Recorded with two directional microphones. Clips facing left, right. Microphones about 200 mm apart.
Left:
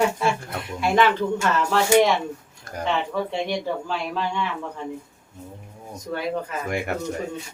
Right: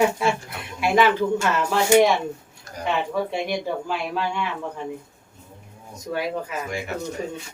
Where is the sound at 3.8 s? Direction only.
10° right (ahead or behind).